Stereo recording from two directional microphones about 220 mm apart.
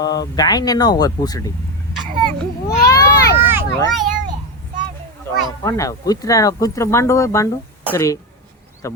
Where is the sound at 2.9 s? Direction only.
15° left (ahead or behind).